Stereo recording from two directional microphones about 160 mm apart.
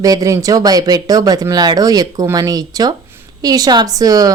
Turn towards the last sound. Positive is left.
turn(degrees=-20)  # may be behind; listen again after turning